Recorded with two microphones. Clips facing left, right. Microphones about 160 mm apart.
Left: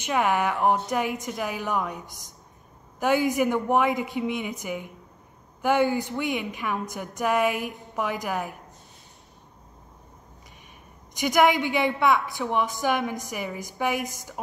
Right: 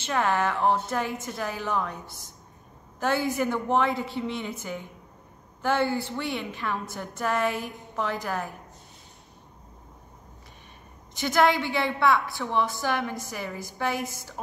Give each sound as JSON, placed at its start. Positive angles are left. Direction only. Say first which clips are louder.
{"t": 0.0, "sound": "a woman's voice", "louder": "left 1 dB", "side_deg": 15}
{"t": 11.1, "sound": "a woman's voice", "louder": "left 2 dB", "side_deg": 15}